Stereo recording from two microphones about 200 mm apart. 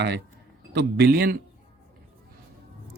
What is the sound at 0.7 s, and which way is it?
Speech, 55° right (ahead or behind).